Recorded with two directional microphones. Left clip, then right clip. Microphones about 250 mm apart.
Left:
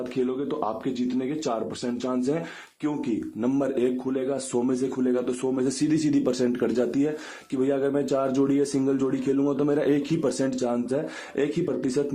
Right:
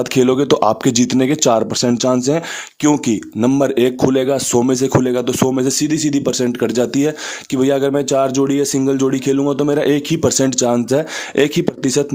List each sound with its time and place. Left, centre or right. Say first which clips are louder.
0.0 s speech: right 13 dB; right
3.4 s speech: right 11 dB; right